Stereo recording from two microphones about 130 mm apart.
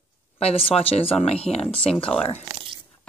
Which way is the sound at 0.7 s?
45° left (ahead or behind).